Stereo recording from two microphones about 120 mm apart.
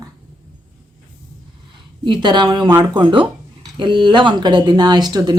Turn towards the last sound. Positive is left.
turn(degrees=-35)  # may be behind; listen again after turning